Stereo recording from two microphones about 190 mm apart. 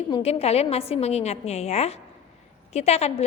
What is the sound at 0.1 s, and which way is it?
A woman's voice, 35° left (ahead or behind).